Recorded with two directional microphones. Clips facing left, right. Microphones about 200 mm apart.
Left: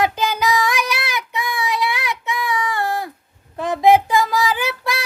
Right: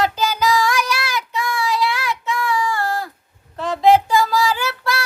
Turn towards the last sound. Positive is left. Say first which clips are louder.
# even
turn(degrees=15)  # may be behind; listen again after turning